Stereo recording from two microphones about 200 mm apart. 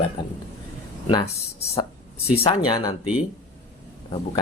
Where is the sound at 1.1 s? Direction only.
20° left (ahead or behind).